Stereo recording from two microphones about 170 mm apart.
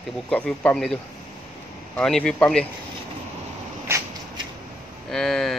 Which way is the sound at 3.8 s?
20° right (ahead or behind).